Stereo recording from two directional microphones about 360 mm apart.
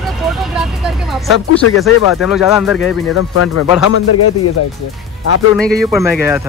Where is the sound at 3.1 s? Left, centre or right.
Left.